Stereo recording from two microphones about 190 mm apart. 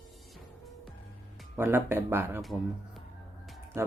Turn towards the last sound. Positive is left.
turn(degrees=-15)  # may be behind; listen again after turning